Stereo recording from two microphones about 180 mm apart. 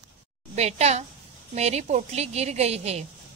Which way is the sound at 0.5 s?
35° right (ahead or behind).